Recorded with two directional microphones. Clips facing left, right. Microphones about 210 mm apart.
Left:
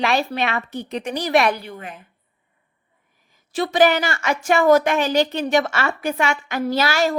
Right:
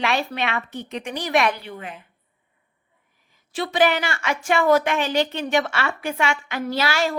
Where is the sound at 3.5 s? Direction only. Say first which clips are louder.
Left 3 dB; 40° left (ahead or behind).